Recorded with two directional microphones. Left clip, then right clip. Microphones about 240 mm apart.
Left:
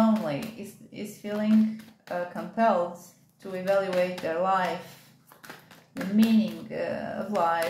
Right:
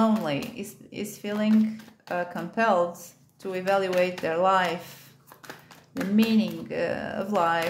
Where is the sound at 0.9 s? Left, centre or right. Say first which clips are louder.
Right 2 dB; right.